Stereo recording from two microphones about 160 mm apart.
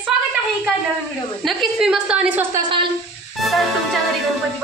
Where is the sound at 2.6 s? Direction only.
30° right (ahead or behind).